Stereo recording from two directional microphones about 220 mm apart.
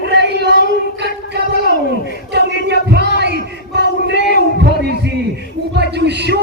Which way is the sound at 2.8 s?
50° right (ahead or behind).